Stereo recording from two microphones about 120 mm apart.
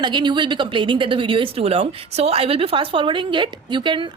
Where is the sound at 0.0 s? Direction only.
40° right (ahead or behind).